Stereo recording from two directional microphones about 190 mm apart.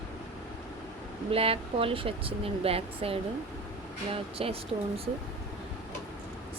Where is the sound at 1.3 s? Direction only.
30° right (ahead or behind).